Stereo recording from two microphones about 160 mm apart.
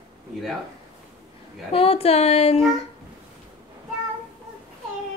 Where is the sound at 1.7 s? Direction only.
35° left (ahead or behind).